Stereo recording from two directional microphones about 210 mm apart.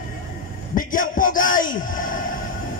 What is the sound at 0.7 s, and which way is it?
Speech, 40° left (ahead or behind).